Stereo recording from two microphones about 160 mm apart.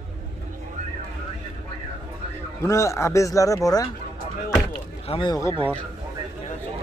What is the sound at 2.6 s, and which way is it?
Speech, 20° left (ahead or behind).